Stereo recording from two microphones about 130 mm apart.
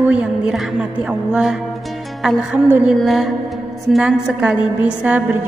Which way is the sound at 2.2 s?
5° right (ahead or behind).